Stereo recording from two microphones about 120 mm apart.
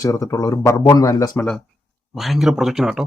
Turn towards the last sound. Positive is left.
turn(degrees=-5)  # may be behind; listen again after turning